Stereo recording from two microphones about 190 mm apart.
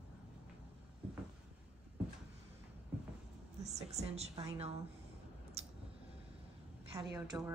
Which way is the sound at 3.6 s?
35° right (ahead or behind).